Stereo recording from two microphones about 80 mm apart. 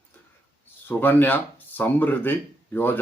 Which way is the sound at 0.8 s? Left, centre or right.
Left.